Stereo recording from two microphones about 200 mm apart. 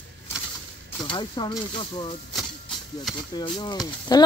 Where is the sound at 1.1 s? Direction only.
25° left (ahead or behind).